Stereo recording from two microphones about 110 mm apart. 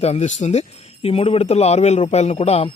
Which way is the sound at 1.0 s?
65° left (ahead or behind).